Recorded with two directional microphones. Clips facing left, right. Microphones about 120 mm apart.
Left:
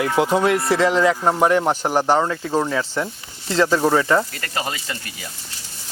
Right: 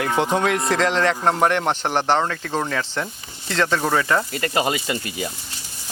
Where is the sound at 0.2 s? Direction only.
5° left (ahead or behind).